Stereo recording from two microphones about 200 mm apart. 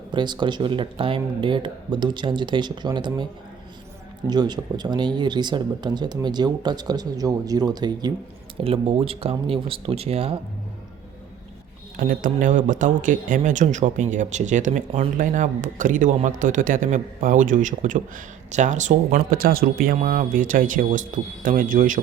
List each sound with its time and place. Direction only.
0.1 s speech: 25° right (ahead or behind)
4.3 s speech: 20° right (ahead or behind)
11.9 s speech: 40° right (ahead or behind)